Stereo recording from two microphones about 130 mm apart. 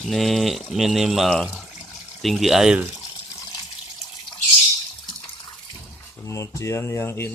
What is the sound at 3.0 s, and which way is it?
Water, 30° left (ahead or behind).